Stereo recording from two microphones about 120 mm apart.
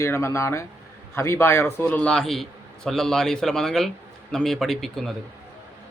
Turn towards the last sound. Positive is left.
turn(degrees=0)  # may be behind; listen again after turning